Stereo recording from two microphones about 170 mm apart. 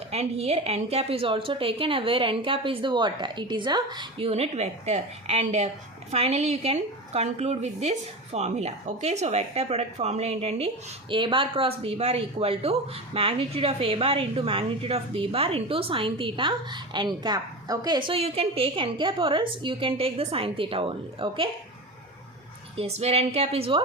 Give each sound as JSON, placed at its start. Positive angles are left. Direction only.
{"t": 0.1, "sound": "a woman's voice", "side_deg": -40}
{"t": 22.8, "sound": "a woman's voice", "side_deg": -40}